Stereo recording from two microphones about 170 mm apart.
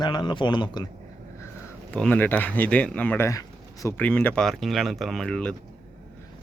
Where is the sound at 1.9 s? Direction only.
10° left (ahead or behind).